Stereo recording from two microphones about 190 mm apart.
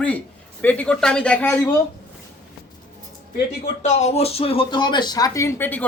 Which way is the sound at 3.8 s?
35° left (ahead or behind).